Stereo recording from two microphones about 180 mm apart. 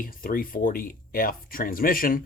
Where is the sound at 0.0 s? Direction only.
50° left (ahead or behind).